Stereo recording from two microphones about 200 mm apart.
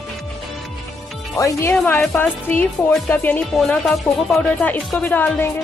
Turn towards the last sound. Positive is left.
turn(degrees=10)  # may be behind; listen again after turning